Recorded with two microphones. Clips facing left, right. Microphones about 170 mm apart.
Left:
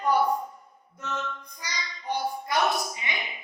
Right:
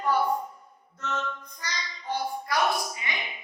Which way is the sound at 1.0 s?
10° left (ahead or behind).